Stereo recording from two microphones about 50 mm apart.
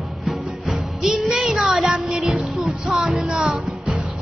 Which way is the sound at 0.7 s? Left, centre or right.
Centre.